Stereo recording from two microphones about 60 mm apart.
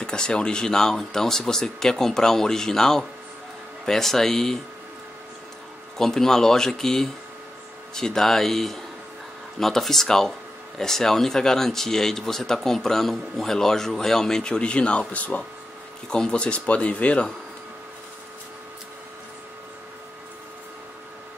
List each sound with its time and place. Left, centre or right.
0.0 s speech: centre
5.9 s speech: centre